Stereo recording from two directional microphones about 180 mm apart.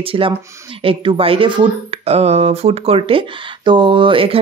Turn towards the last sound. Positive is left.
turn(degrees=-30)  # may be behind; listen again after turning